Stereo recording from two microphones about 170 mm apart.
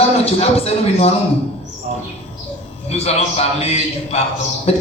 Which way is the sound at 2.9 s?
40° left (ahead or behind).